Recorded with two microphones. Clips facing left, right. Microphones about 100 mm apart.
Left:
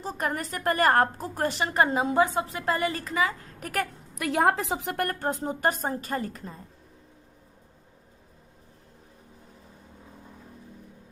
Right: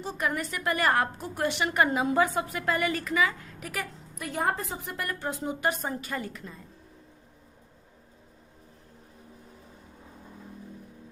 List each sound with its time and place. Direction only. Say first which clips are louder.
0.0 s a woman's voice: even; 40° left (ahead or behind)
4.1 s a woman's voice: left 6 dB; 90° left
4.9 s a woman's voice: left 2 dB; 50° left (ahead or behind)